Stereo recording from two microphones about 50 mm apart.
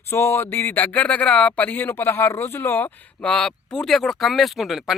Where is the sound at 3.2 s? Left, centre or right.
Centre.